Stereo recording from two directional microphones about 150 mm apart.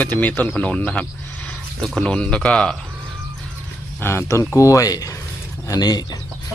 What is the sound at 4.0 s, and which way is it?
Speech, 15° left (ahead or behind).